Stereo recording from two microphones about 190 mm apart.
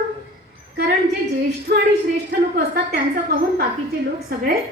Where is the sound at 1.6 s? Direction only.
55° right (ahead or behind).